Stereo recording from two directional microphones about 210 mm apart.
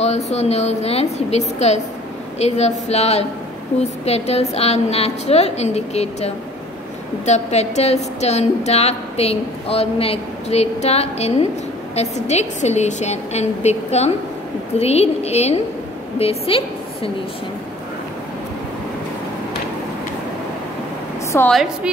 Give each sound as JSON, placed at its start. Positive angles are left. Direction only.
{"t": 0.0, "sound": "a woman's voice", "side_deg": 30}
{"t": 21.3, "sound": "a woman's voice", "side_deg": 10}